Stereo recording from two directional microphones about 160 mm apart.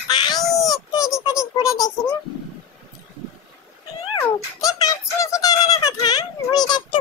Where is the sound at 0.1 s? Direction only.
25° left (ahead or behind).